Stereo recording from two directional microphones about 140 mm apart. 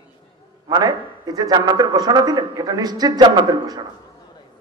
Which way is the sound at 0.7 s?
30° right (ahead or behind).